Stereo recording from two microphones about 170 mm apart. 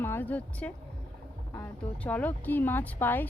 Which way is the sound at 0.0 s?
10° left (ahead or behind).